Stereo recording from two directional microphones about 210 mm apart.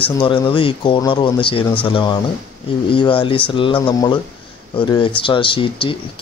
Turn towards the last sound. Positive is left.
turn(degrees=25)  # may be behind; listen again after turning